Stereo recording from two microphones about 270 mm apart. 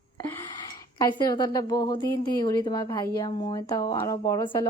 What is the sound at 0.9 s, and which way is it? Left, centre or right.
A woman's voice, centre.